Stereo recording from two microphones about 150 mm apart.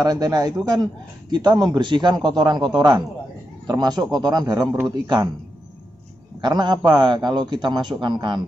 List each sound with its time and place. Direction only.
0.0 s a man's voice: 25° right (ahead or behind)
6.4 s a man's voice: 30° right (ahead or behind)